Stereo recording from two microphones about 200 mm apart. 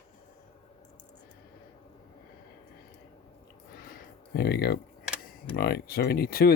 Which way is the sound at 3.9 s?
50° left (ahead or behind).